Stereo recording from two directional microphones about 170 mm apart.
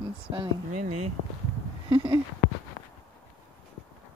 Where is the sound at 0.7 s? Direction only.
40° right (ahead or behind).